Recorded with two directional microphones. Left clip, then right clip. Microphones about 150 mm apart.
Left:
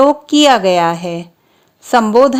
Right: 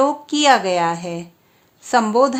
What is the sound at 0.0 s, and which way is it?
Speech, 40° left (ahead or behind).